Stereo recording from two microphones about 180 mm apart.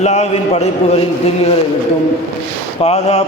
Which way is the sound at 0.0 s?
40° left (ahead or behind).